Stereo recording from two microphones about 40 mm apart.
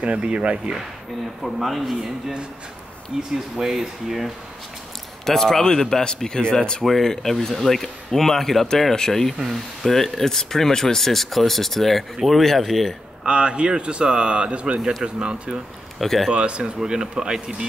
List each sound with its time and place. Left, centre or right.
0.0 s speech: right
1.4 s speech: centre
3.1 s speech: right
5.2 s speech: centre
6.8 s speech: centre
13.2 s speech: right
16.0 s speech: centre
16.3 s speech: right
16.8 s speech: centre